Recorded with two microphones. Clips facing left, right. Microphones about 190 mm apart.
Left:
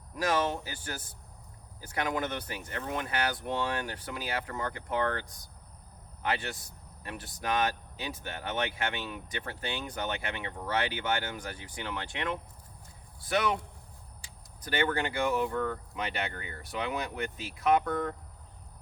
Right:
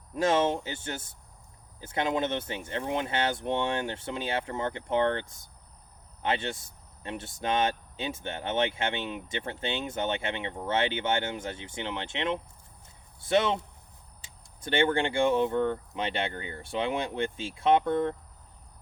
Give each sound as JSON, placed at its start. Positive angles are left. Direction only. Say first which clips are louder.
{"t": 0.1, "sound": "speech", "louder": "right 4 dB", "side_deg": -25}